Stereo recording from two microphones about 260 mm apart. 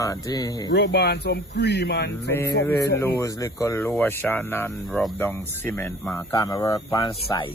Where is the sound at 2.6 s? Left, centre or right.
Centre.